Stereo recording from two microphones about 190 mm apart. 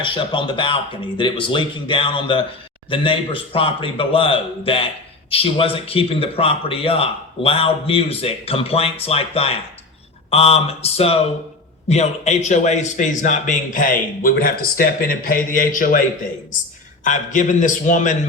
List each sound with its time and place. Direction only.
0.0 s a man's voice: 25° left (ahead or behind)